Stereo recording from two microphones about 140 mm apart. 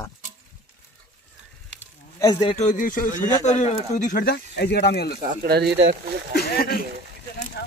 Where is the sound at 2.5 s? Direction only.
65° left (ahead or behind).